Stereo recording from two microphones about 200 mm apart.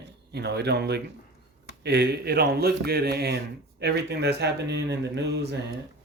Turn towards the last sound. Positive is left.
turn(degrees=-60)  # may be behind; listen again after turning